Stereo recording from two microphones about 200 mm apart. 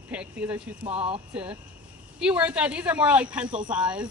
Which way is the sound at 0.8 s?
30° right (ahead or behind).